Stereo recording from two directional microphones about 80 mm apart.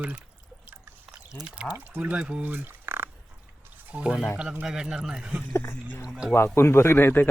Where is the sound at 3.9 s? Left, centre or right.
Centre.